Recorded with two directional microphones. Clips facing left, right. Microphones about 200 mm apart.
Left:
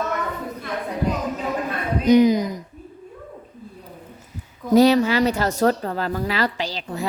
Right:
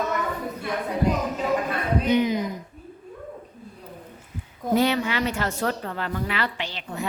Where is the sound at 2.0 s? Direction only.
40° left (ahead or behind).